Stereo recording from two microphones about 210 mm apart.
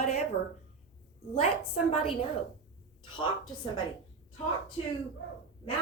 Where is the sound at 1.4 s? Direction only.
30° left (ahead or behind).